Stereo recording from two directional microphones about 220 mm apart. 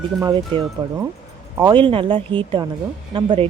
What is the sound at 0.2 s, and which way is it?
Speech, 20° right (ahead or behind).